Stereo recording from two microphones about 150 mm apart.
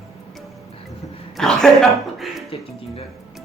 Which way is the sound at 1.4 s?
5° left (ahead or behind).